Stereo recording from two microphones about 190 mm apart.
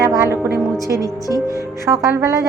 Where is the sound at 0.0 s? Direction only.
15° right (ahead or behind).